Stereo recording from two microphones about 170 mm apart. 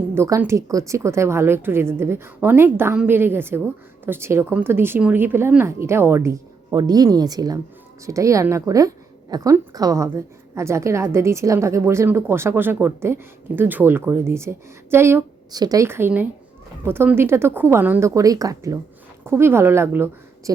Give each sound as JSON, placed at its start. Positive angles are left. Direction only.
{"t": 0.1, "sound": "a woman's voice", "side_deg": -15}